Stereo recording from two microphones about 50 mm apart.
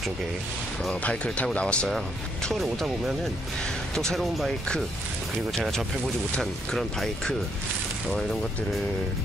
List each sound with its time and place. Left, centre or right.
1.0 s speech: left
2.5 s speech: centre
3.9 s speech: centre
6.4 s speech: centre